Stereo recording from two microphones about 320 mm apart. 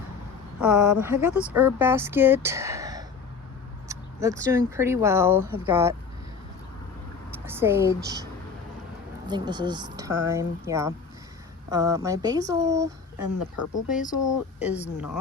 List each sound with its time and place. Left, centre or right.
0.6 s speech: centre
7.3 s a woman's voice: centre
9.2 s speech: centre
13.2 s speech: left
14.2 s speech: left